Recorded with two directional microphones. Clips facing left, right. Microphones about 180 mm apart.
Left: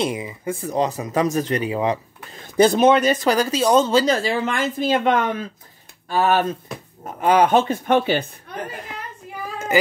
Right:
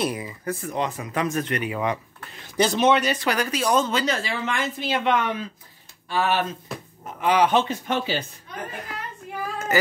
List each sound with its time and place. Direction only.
0.0 s speech: 20° left (ahead or behind)
2.3 s speech: 55° left (ahead or behind)
3.3 s speech: 30° left (ahead or behind); by 8.3 s 60° left (ahead or behind)